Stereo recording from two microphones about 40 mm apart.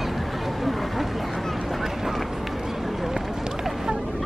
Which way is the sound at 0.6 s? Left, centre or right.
Centre.